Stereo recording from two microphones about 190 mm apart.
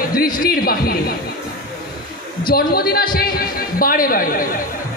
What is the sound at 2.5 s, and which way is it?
A man's voice, 55° left (ahead or behind).